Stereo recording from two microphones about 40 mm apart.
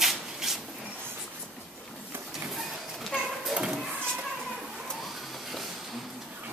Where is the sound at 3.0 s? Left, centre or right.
Centre.